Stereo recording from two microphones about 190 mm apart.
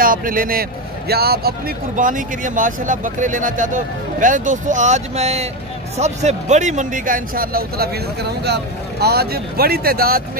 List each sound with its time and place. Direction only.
0.0 s speech: 50° right (ahead or behind)
2.0 s speech: 45° right (ahead or behind)